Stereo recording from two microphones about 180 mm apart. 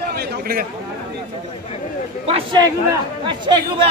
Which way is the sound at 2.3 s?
30° right (ahead or behind).